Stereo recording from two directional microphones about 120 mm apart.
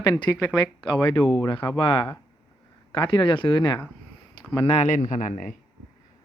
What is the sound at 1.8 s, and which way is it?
Speech, 45° left (ahead or behind).